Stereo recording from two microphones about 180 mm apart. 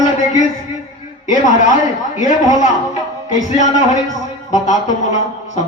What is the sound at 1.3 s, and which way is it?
A man's voice, 45° left (ahead or behind).